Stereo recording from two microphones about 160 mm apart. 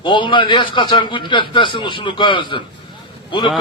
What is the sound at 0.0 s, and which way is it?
A man's voice, 30° left (ahead or behind).